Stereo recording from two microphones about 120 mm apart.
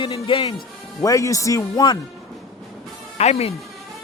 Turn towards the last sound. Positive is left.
turn(degrees=60)  # may be behind; listen again after turning